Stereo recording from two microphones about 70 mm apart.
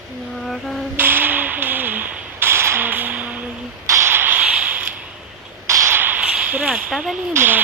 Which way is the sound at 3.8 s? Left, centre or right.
Right.